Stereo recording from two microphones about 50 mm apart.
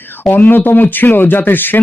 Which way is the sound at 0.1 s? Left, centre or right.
Left.